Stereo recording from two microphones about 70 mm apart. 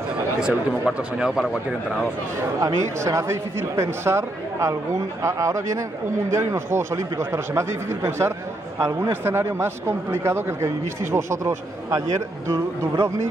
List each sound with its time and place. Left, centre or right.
0.4 s speech: centre
2.6 s a man's voice: right